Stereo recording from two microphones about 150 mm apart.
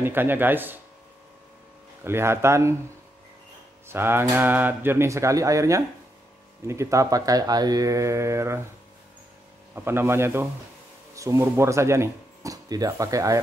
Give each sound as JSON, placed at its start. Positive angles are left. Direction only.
{"t": 0.0, "sound": "speech", "side_deg": -15}
{"t": 2.0, "sound": "speech", "side_deg": -15}
{"t": 3.9, "sound": "speech", "side_deg": -15}
{"t": 9.8, "sound": "speech", "side_deg": -15}